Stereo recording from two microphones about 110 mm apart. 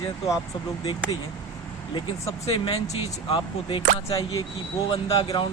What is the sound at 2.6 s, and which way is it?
Speech, 55° left (ahead or behind).